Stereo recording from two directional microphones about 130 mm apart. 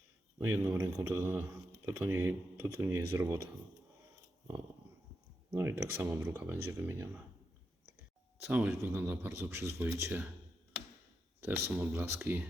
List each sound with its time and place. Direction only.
0.3 s speech: 15° right (ahead or behind)
5.5 s speech: 15° right (ahead or behind)
8.4 s speech: 15° right (ahead or behind)
11.3 s speech: 15° right (ahead or behind)